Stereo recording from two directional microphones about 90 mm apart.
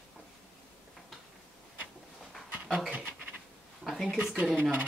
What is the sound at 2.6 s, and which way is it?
Speech, centre (ahead or behind).